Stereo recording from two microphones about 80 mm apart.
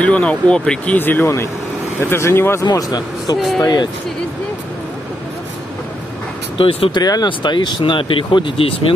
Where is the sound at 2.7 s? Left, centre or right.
Left.